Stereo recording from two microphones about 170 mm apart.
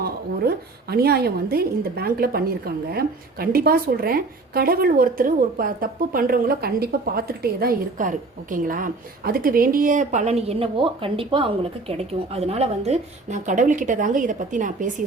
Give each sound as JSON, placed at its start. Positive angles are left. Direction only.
{"t": 0.0, "sound": "a woman's voice", "side_deg": -65}